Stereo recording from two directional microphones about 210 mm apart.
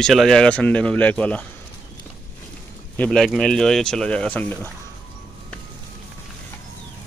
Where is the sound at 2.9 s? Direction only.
5° left (ahead or behind).